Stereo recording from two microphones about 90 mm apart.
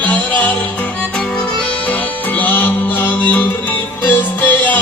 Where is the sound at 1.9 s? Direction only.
20° left (ahead or behind).